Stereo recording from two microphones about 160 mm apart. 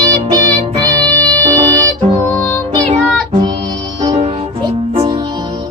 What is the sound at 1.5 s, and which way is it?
Music, 20° right (ahead or behind).